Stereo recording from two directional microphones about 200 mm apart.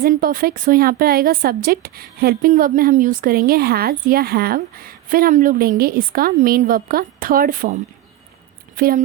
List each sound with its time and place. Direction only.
0.0 s a woman's voice: 45° right (ahead or behind)